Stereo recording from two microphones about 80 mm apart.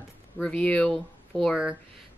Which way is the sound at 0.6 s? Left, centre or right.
Centre.